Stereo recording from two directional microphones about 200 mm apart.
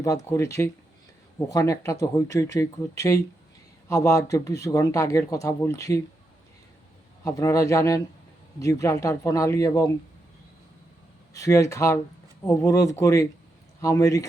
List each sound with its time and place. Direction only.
0.0 s speech: 15° left (ahead or behind)
7.3 s speech: 15° left (ahead or behind)
11.3 s speech: 15° left (ahead or behind)